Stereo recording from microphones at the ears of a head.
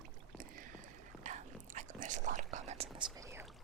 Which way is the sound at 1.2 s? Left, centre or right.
Right.